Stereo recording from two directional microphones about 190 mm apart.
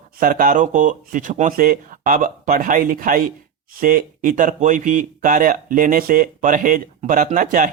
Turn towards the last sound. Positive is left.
turn(degrees=-45)  # may be behind; listen again after turning